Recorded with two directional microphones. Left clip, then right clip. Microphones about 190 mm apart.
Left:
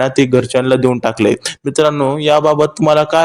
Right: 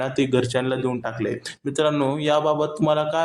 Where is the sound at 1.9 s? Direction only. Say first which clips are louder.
Left 8 dB; 30° left (ahead or behind).